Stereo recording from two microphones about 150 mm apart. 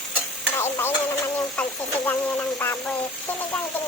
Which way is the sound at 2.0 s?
10° left (ahead or behind).